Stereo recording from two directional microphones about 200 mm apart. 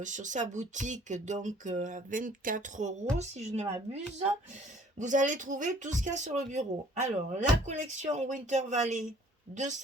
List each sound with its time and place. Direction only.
0.0 s speech: 40° right (ahead or behind)